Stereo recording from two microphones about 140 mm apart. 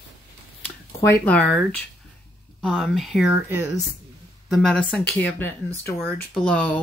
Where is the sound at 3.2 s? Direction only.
15° right (ahead or behind).